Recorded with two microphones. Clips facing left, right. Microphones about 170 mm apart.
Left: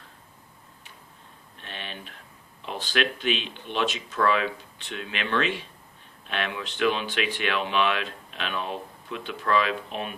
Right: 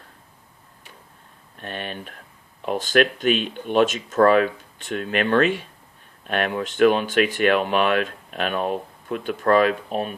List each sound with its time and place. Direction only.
1.5 s speech: 50° right (ahead or behind)